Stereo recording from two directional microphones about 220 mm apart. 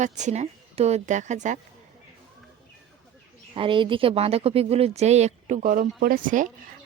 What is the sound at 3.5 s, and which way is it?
Speech, 25° right (ahead or behind).